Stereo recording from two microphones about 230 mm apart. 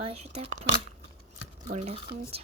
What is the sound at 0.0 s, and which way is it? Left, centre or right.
Speech, right.